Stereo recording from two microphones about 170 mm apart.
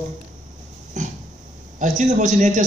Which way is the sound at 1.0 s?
45° right (ahead or behind).